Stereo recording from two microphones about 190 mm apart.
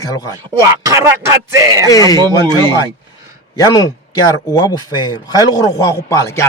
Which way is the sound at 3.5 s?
20° left (ahead or behind).